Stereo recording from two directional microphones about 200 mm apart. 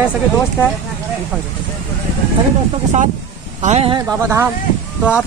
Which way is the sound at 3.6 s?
35° right (ahead or behind).